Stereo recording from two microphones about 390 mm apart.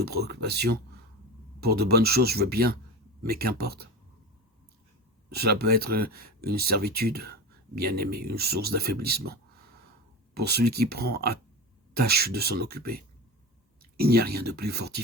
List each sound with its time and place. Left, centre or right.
0.0 s speech: right
5.3 s speech: right